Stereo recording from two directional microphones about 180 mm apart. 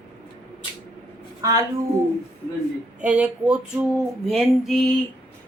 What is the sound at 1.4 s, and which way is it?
Speech, 20° right (ahead or behind).